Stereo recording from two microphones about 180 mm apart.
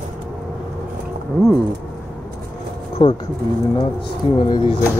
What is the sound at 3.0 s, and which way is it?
Speech, 30° left (ahead or behind).